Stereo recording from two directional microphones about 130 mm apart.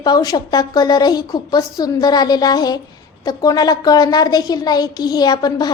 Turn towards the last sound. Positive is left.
turn(degrees=30)  # may be behind; listen again after turning